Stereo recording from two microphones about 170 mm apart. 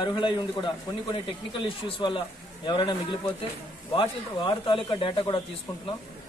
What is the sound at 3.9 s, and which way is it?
Speech, 30° left (ahead or behind).